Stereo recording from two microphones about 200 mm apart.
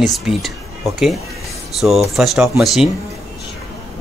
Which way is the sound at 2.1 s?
Centre (ahead or behind).